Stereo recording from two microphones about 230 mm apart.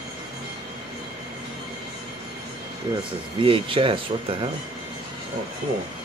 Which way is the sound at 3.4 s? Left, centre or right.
Right.